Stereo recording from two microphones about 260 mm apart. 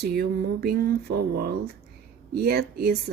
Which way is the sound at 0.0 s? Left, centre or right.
Right.